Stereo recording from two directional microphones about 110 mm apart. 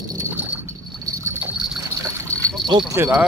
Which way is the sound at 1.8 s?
30° right (ahead or behind).